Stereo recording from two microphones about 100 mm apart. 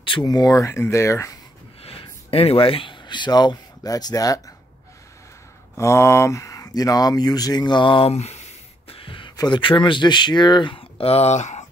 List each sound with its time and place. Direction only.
0.0 s speech: 50° left (ahead or behind); by 1.4 s 30° left (ahead or behind)
1.8 s speech: 80° left; by 4.4 s 40° left (ahead or behind)
5.8 s speech: 30° left (ahead or behind); by 11.6 s 90° left